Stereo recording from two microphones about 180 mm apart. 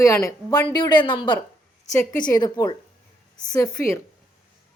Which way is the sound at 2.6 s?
20° left (ahead or behind).